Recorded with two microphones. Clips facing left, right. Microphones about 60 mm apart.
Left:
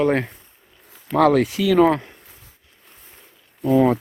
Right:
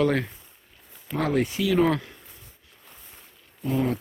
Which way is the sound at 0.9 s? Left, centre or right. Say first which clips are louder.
Left 9 dB; left.